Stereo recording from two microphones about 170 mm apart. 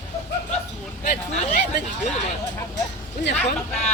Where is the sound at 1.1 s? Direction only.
45° left (ahead or behind).